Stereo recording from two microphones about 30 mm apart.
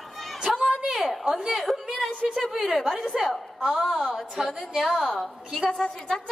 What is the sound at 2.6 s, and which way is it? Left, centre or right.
A woman's voice, centre.